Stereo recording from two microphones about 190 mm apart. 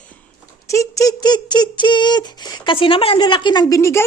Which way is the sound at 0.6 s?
15° left (ahead or behind).